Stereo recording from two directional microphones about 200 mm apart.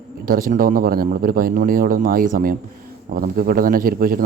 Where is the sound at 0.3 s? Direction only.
45° right (ahead or behind).